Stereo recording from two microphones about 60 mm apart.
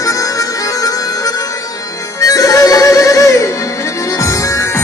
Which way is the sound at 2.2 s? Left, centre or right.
Left.